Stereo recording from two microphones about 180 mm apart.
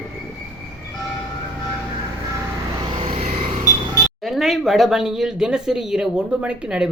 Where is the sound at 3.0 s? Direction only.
35° right (ahead or behind).